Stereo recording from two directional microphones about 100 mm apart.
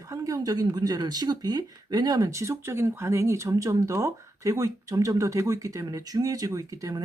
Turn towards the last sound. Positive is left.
turn(degrees=-35)  # may be behind; listen again after turning